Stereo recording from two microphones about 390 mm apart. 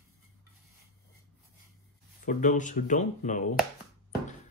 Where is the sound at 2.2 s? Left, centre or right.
Centre.